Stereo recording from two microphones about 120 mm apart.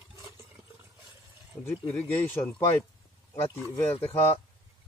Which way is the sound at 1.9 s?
15° left (ahead or behind).